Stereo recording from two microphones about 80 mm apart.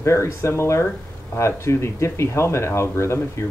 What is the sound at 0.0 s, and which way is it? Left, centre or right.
Speech, left.